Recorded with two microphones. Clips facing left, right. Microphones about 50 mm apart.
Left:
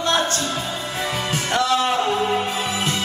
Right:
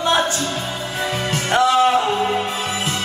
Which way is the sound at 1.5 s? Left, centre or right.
Right.